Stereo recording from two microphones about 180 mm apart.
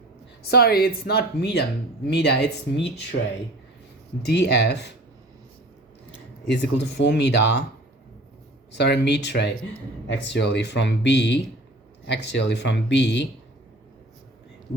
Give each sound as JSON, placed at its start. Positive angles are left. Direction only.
{"t": 0.4, "sound": "speech", "side_deg": 60}
{"t": 4.3, "sound": "speech", "side_deg": 70}
{"t": 6.5, "sound": "speech", "side_deg": 75}
{"t": 8.7, "sound": "speech", "side_deg": 70}